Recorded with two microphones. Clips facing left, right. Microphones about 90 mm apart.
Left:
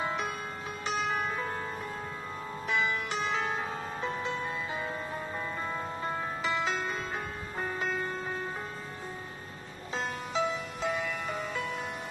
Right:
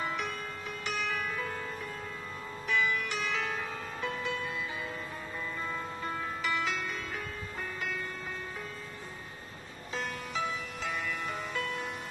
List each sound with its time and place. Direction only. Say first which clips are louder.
0.9 s music: left 4 dB; 30° left (ahead or behind)
2.7 s music: even; 30° left (ahead or behind)
6.0 s music: left 1 dB; 30° left (ahead or behind)
10.8 s music: left 4 dB; 5° left (ahead or behind)